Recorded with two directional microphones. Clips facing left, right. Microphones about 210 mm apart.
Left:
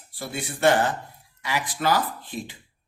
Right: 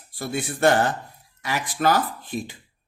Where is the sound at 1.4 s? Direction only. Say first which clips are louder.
Right 2 dB; 45° right (ahead or behind).